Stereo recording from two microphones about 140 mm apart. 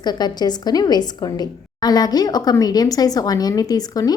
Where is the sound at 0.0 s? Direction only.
30° left (ahead or behind).